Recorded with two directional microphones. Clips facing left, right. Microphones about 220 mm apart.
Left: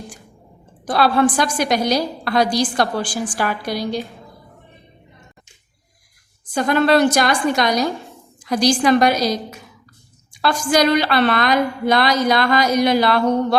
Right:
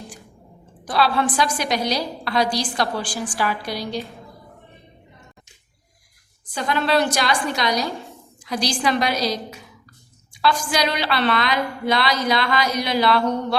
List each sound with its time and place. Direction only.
0.9 s a woman's voice: 50° left (ahead or behind)
6.5 s a woman's voice: 50° left (ahead or behind)